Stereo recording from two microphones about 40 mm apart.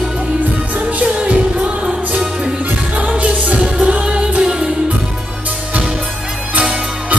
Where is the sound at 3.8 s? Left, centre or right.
Right.